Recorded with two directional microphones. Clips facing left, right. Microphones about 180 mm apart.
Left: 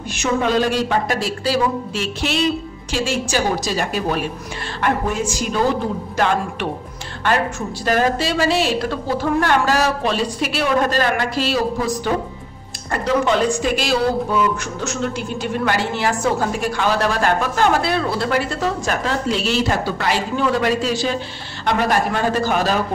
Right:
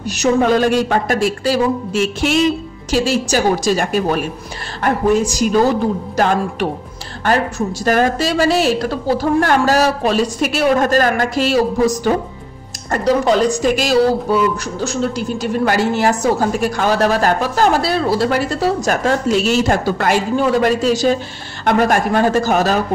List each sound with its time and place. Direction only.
0.1 s speech: 40° right (ahead or behind)